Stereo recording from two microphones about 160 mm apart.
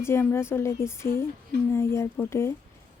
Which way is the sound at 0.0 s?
15° left (ahead or behind).